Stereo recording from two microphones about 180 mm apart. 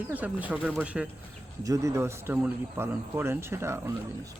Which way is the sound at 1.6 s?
20° right (ahead or behind).